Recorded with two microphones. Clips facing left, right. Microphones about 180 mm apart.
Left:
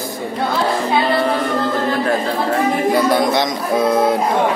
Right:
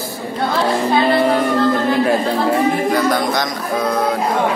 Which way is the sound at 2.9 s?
25° left (ahead or behind).